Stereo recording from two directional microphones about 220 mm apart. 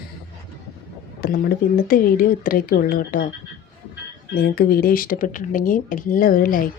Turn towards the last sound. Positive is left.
turn(degrees=40)  # may be behind; listen again after turning